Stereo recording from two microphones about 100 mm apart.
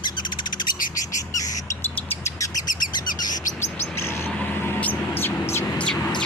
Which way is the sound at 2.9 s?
45° left (ahead or behind).